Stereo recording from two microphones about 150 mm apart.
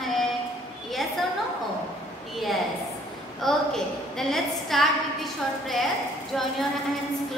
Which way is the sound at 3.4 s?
5° left (ahead or behind).